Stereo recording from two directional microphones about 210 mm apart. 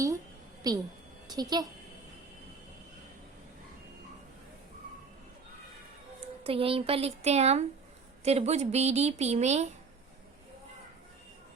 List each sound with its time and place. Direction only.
0.7 s a woman's voice: 20° right (ahead or behind)
6.1 s a woman's voice: 25° right (ahead or behind)